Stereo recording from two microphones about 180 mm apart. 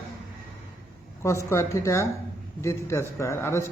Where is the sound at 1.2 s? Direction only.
15° left (ahead or behind).